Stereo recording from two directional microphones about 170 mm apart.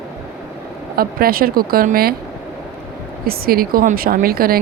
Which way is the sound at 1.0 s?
60° right (ahead or behind).